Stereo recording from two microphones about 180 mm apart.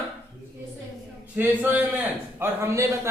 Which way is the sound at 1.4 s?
10° right (ahead or behind).